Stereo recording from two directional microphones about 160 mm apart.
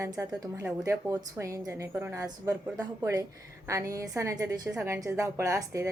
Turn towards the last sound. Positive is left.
turn(degrees=-20)  # may be behind; listen again after turning